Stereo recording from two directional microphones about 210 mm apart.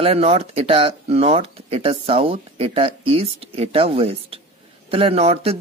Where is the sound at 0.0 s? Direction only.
30° right (ahead or behind).